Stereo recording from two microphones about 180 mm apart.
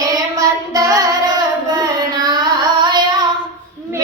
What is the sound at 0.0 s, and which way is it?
Child singing, 20° right (ahead or behind).